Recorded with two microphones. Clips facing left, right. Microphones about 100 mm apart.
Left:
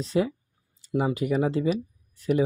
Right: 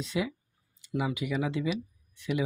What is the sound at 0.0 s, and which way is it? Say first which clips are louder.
Speech: left 7 dB; 40° left (ahead or behind).